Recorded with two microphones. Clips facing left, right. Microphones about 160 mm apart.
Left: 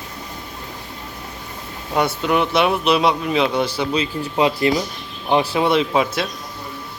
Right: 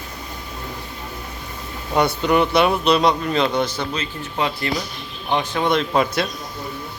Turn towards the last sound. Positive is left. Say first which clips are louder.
# left 1 dB
turn(degrees=0)  # may be behind; listen again after turning